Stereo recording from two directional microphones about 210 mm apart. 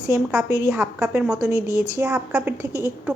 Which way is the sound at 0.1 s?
5° right (ahead or behind).